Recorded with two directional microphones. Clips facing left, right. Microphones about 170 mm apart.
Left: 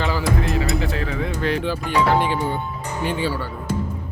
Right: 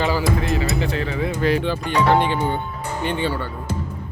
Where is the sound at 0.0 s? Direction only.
Centre (ahead or behind).